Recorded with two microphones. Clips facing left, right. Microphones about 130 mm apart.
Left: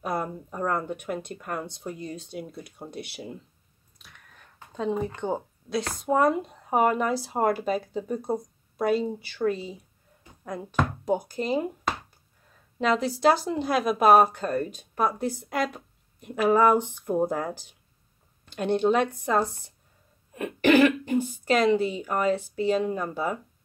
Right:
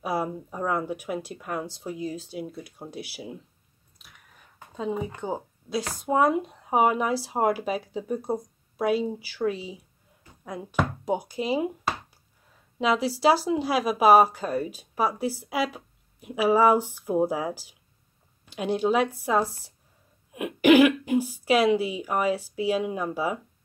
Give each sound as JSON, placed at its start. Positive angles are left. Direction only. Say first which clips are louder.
{"t": 0.0, "sound": "speech", "louder": "right 2 dB", "side_deg": -5}
{"t": 11.3, "sound": "a sound", "louder": "right 1 dB", "side_deg": -5}
{"t": 12.7, "sound": "speech", "louder": "even", "side_deg": -5}